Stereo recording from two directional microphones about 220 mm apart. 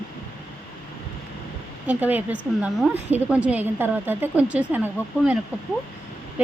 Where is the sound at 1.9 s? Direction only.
5° right (ahead or behind).